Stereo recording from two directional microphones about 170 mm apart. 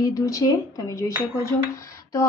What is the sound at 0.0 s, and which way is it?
A woman's voice, 20° left (ahead or behind).